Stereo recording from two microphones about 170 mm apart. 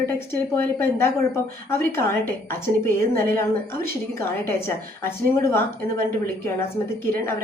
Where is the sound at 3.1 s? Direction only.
60° right (ahead or behind).